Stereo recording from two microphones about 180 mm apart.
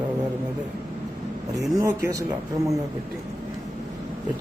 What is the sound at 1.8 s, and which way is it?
Speech, 15° right (ahead or behind).